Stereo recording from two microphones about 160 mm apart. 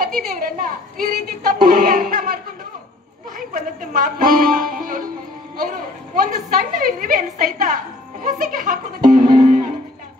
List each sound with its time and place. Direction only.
0.0 s a woman's voice: 60° right (ahead or behind)
3.3 s a woman's voice: 60° right (ahead or behind)
6.1 s a woman's voice: 60° right (ahead or behind)